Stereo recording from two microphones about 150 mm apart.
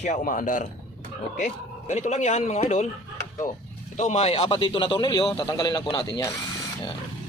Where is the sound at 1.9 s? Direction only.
50° left (ahead or behind).